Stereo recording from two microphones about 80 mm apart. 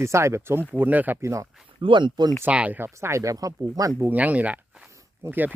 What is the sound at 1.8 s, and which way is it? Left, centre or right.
Speech, right.